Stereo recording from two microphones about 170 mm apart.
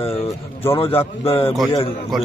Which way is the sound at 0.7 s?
35° left (ahead or behind).